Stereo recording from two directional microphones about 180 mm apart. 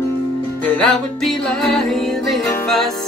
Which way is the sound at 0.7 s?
5° left (ahead or behind).